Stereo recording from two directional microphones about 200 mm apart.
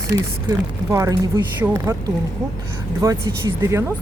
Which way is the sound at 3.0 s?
15° right (ahead or behind).